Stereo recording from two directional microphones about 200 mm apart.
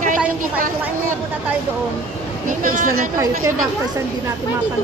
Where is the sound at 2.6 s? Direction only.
45° right (ahead or behind).